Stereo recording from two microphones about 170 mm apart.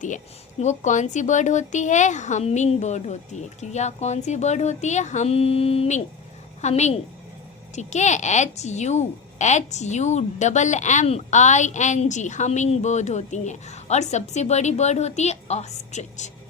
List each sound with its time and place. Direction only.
0.6 s a woman's voice: 45° left (ahead or behind)